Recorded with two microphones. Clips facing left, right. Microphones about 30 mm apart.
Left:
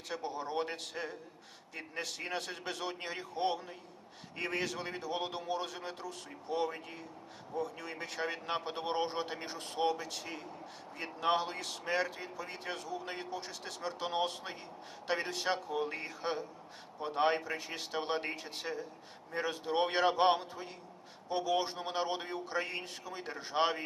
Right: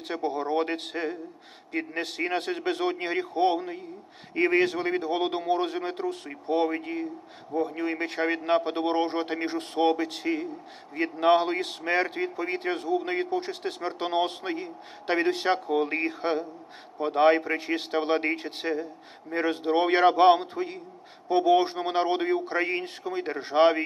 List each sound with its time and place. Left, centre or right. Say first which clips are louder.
0.1 s speech: right 10 dB; right
7.5 s speech: right 11 dB; right